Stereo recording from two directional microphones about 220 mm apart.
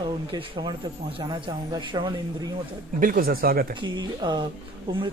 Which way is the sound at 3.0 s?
40° right (ahead or behind).